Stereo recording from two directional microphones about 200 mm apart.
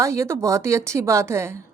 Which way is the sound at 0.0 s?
15° right (ahead or behind).